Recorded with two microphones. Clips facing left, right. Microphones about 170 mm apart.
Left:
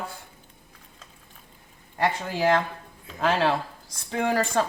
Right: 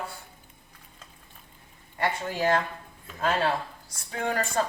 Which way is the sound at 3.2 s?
90° left.